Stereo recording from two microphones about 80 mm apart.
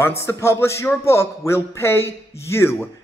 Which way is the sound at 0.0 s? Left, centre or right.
Left.